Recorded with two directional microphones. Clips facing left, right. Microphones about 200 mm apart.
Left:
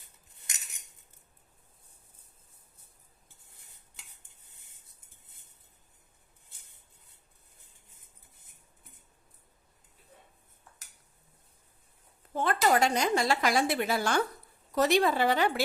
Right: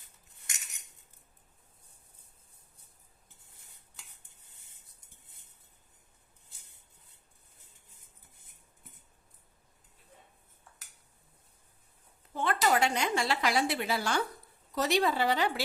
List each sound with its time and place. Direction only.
12.3 s a woman's voice: 45° left (ahead or behind)